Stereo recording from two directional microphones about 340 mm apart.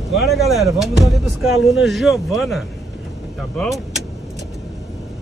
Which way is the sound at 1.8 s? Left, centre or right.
Centre.